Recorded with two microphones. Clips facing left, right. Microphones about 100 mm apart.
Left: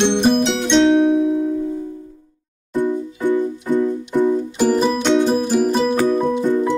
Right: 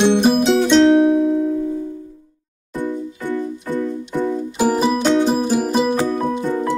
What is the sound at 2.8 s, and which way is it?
Music, 15° left (ahead or behind).